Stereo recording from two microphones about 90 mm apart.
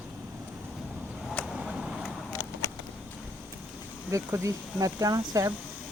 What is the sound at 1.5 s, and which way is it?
Vehicle, centre (ahead or behind).